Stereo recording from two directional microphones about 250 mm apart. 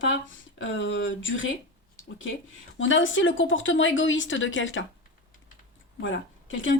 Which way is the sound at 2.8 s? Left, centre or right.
Left.